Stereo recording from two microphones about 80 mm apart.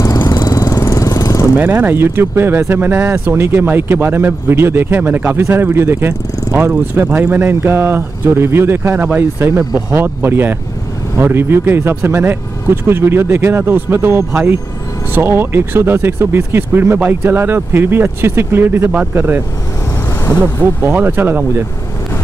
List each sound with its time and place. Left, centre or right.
0.4 s vehicle: left
1.6 s speech: right
20.8 s speech: right